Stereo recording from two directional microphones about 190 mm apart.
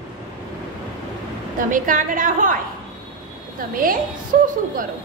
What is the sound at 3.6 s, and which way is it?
Speech, 45° right (ahead or behind).